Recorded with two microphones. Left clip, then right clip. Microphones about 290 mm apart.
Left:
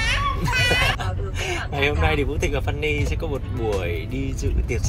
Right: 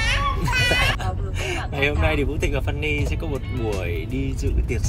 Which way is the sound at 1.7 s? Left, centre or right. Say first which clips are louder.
Even; centre.